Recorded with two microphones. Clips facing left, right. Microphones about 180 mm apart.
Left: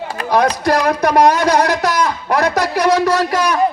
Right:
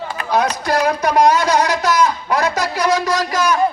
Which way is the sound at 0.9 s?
60° left (ahead or behind).